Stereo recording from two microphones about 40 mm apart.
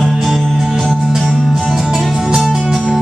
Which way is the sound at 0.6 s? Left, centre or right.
Centre.